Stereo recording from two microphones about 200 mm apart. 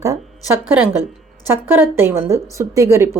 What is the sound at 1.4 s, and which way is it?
Speech, 10° right (ahead or behind).